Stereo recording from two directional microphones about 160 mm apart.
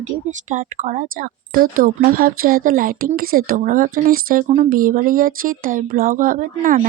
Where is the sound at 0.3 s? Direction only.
50° right (ahead or behind); by 4.4 s 65° right (ahead or behind).